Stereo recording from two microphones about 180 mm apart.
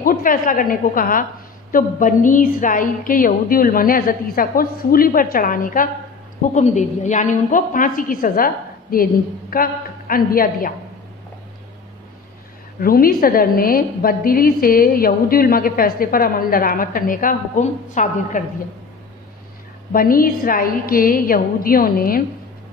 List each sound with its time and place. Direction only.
0.0 s a woman's voice: 50° left (ahead or behind)
12.8 s a woman's voice: 55° left (ahead or behind)
19.9 s a woman's voice: 50° left (ahead or behind)